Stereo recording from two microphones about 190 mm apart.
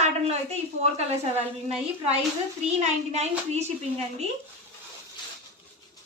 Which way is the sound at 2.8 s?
35° right (ahead or behind).